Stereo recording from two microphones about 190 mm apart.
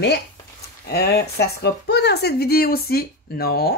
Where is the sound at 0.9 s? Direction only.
60° left (ahead or behind).